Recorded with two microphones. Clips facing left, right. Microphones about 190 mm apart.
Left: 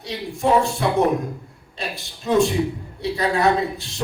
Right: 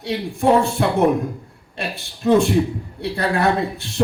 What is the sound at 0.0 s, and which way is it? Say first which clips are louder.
Speech: right 4 dB; 55° right (ahead or behind).